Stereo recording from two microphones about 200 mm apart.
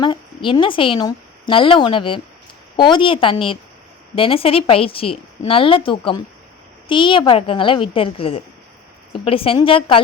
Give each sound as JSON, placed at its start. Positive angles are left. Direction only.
{"t": 0.0, "sound": "a woman's voice", "side_deg": 25}